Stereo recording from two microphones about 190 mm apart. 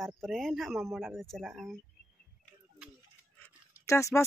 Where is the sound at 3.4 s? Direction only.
15° left (ahead or behind).